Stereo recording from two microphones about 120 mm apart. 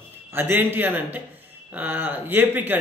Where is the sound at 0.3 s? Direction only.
15° right (ahead or behind).